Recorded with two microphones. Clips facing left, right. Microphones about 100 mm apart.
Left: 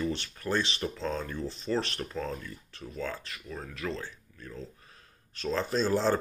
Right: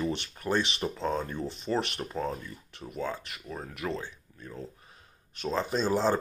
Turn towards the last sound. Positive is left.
turn(degrees=-15)  # may be behind; listen again after turning